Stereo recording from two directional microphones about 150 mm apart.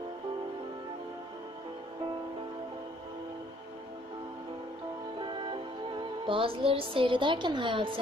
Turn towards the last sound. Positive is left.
turn(degrees=-35)  # may be behind; listen again after turning